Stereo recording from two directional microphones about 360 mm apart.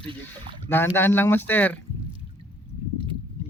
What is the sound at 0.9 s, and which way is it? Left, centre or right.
Speech, centre.